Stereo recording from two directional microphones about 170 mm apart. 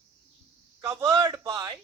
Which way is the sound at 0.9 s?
20° right (ahead or behind).